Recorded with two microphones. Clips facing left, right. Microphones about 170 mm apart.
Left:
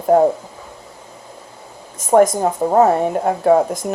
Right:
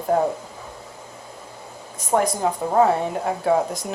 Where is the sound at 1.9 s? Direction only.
45° left (ahead or behind).